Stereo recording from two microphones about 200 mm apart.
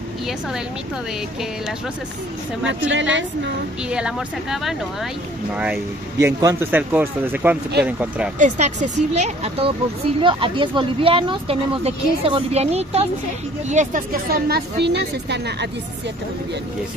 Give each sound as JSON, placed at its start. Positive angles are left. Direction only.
{"t": 2.9, "sound": "a woman's voice", "side_deg": -70}
{"t": 3.9, "sound": "speech", "side_deg": -5}
{"t": 6.1, "sound": "speech", "side_deg": -15}
{"t": 8.4, "sound": "a woman's voice", "side_deg": -35}